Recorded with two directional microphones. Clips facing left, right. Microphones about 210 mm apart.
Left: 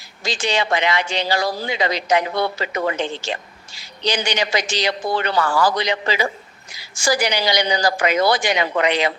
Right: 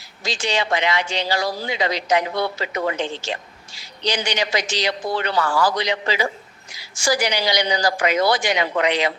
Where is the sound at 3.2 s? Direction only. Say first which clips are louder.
Left 1 dB; 55° left (ahead or behind).